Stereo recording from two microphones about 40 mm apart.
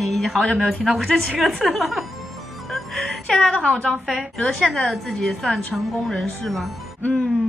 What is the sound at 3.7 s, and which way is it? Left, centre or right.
Speech, left.